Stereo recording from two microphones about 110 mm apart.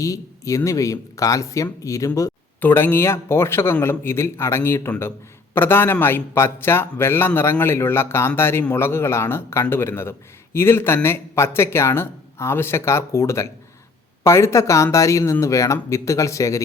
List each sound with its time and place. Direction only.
0.0 s a man's voice: 30° left (ahead or behind)
2.6 s a man's voice: 20° left (ahead or behind)